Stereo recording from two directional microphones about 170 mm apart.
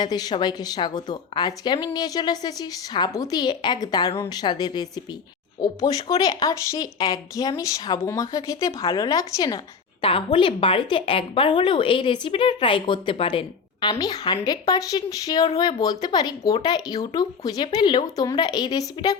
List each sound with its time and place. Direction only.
0.0 s a woman's voice: 25° left (ahead or behind)
10.0 s a woman's voice: 30° left (ahead or behind)